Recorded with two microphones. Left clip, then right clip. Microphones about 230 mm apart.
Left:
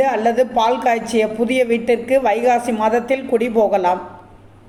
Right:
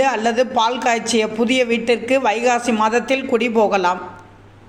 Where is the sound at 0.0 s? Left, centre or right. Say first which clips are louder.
Left 1 dB; centre.